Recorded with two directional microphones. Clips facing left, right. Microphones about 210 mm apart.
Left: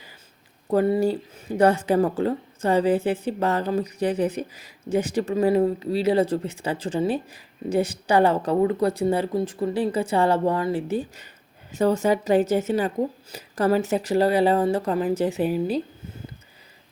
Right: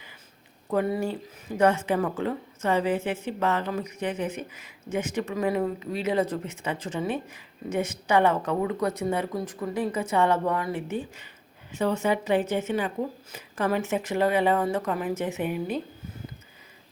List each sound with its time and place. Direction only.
0.7 s speech: 35° left (ahead or behind)